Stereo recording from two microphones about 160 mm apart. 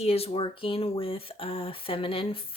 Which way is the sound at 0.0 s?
40° left (ahead or behind).